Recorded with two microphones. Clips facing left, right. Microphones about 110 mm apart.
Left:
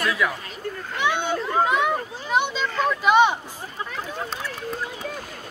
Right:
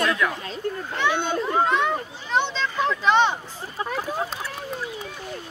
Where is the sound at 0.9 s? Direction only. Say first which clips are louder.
Left 1 dB; 15° left (ahead or behind).